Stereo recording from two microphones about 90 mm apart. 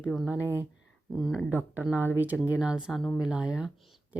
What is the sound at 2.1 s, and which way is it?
Speech, 20° right (ahead or behind).